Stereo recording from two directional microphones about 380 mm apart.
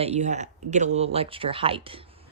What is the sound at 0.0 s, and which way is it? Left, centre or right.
A woman's voice, centre.